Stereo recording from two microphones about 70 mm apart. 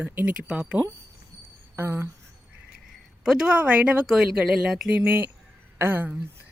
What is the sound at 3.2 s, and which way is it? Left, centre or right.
Speech, centre.